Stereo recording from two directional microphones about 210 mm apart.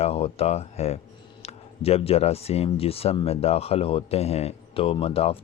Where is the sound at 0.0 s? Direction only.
30° left (ahead or behind).